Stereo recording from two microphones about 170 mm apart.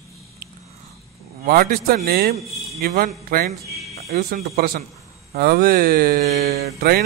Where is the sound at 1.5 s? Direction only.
60° right (ahead or behind).